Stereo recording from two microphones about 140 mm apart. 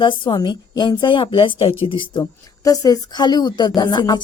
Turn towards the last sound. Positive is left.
turn(degrees=30)  # may be behind; listen again after turning